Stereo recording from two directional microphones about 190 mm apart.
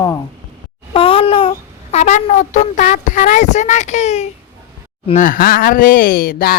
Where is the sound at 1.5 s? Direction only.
40° left (ahead or behind).